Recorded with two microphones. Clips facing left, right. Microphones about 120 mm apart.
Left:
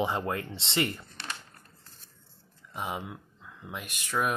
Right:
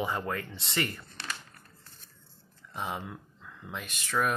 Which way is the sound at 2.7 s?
5° left (ahead or behind).